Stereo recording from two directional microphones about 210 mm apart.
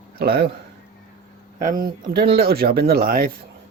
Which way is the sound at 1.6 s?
40° right (ahead or behind).